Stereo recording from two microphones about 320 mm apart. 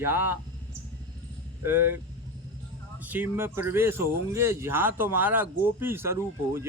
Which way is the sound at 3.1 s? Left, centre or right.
Centre.